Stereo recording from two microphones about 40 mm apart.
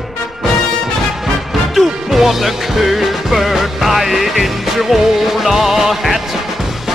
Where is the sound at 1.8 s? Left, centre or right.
Centre.